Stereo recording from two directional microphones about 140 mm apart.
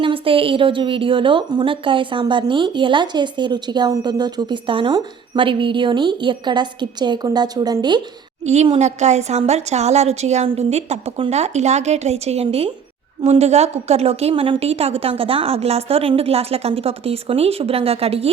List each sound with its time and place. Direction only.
0.0 s a woman's voice: 40° right (ahead or behind)
8.6 s a woman's voice: 50° right (ahead or behind)